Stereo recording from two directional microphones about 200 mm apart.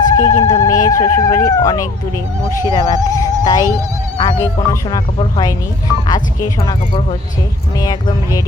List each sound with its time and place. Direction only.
0.2 s speech: 20° left (ahead or behind)